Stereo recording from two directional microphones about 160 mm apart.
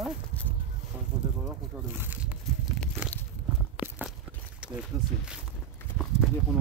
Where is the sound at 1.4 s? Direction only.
10° right (ahead or behind).